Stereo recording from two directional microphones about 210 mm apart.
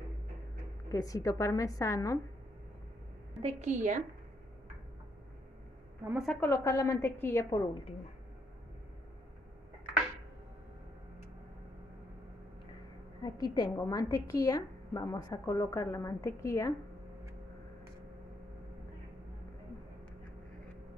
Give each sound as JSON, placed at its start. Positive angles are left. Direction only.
{"t": 0.9, "sound": "a woman's voice", "side_deg": 15}
{"t": 3.4, "sound": "a woman's voice", "side_deg": -35}
{"t": 6.0, "sound": "a woman's voice", "side_deg": 0}
{"t": 6.4, "sound": "a woman's voice", "side_deg": 15}
{"t": 13.2, "sound": "a woman's voice", "side_deg": 20}